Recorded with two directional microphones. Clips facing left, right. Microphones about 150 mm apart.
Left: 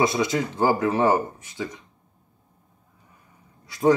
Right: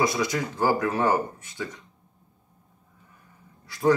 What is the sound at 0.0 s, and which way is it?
Speech, 20° left (ahead or behind).